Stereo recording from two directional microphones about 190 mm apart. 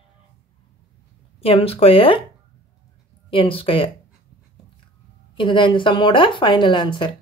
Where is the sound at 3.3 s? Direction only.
30° left (ahead or behind).